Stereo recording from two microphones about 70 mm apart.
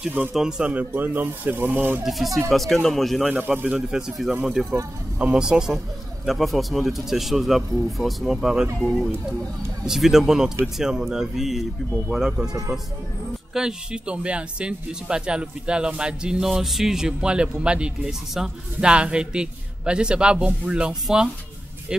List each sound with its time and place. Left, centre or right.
0.3 s speech: centre
0.7 s speech: right
2.0 s speech: centre
3.3 s speech: right
9.8 s speech: centre
13.5 s speech: centre